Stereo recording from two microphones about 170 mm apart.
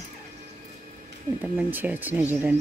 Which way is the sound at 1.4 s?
10° right (ahead or behind).